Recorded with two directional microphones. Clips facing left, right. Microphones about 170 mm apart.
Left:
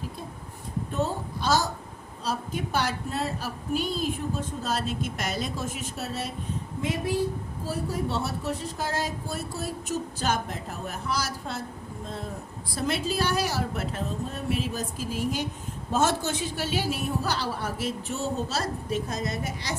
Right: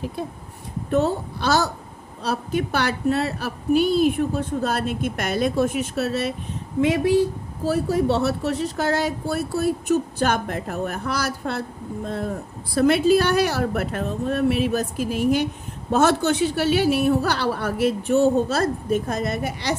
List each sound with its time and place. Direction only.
0.9 s a woman's voice: 70° right (ahead or behind)
6.8 s speech: 85° right; by 19.7 s 65° right (ahead or behind)